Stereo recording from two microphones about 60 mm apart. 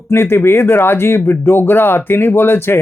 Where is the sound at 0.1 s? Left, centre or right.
Left.